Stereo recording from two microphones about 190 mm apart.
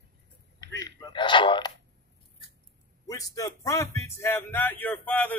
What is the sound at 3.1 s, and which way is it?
Speech, 20° left (ahead or behind).